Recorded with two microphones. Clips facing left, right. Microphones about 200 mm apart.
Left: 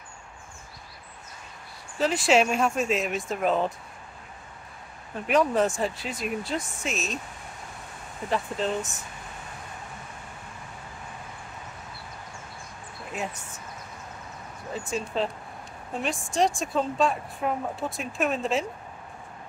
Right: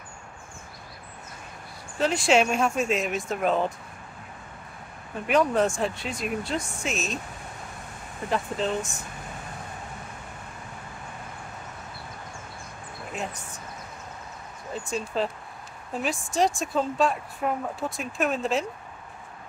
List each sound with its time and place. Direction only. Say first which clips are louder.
2.0 s speech: even; centre (ahead or behind)
5.2 s speech: even; centre (ahead or behind)
8.3 s speech: even; centre (ahead or behind)
14.7 s speech: even; centre (ahead or behind)